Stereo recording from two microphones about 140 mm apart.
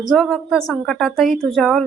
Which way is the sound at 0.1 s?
Centre (ahead or behind).